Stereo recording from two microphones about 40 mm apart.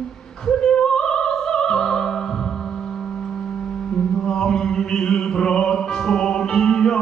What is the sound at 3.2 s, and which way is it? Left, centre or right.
Mantra, centre.